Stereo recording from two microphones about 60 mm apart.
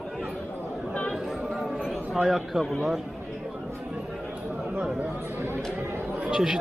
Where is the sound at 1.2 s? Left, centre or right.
Centre.